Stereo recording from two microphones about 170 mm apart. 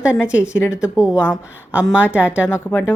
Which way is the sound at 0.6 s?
15° left (ahead or behind).